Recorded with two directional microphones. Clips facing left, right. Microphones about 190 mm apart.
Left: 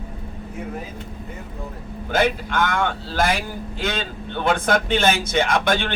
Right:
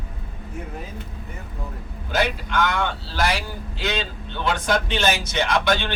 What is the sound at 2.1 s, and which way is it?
Speech, 50° left (ahead or behind).